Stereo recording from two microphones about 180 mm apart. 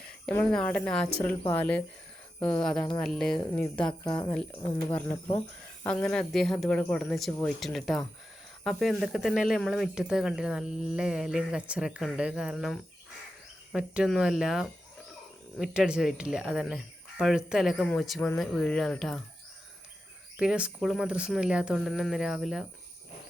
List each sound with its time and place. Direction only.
0.3 s speech: 5° left (ahead or behind)
4.0 s speech: 25° left (ahead or behind)
5.8 s speech: 5° left (ahead or behind)
20.3 s speech: 5° right (ahead or behind)